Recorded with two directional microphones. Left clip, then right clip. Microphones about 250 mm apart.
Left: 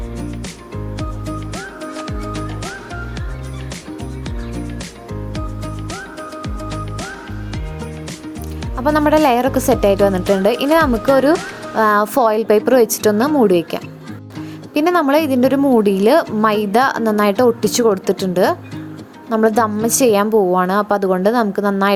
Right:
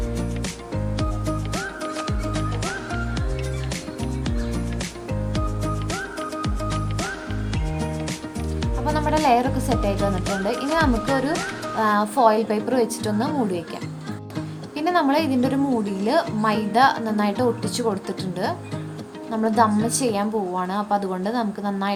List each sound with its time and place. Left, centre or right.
1.5 s music: centre
5.3 s music: centre
8.8 s a woman's voice: left